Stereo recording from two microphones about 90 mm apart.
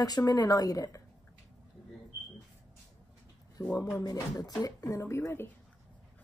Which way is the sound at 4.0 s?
45° left (ahead or behind).